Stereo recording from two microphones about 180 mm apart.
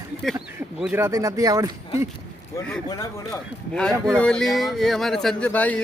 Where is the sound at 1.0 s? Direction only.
20° right (ahead or behind).